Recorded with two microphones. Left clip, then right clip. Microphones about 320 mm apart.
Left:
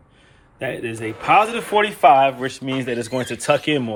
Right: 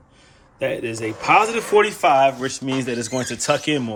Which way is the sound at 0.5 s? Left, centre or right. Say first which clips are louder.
Right 3 dB; left.